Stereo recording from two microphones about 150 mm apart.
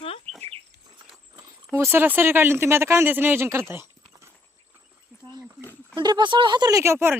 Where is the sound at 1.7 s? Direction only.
15° right (ahead or behind).